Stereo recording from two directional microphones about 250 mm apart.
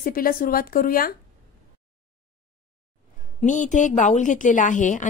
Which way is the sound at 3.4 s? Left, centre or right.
Left.